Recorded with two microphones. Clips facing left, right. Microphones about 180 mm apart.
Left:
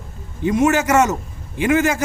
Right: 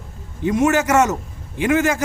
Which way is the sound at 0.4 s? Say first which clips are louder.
Left 1 dB; 10° left (ahead or behind).